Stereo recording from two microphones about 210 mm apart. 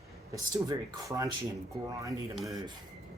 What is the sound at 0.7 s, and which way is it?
Speech, 15° right (ahead or behind).